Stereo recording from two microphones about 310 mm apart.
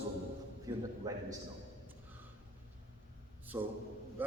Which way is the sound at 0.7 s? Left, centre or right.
Centre.